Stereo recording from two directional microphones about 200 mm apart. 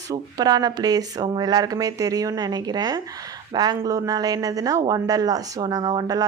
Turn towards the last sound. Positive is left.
turn(degrees=-20)  # may be behind; listen again after turning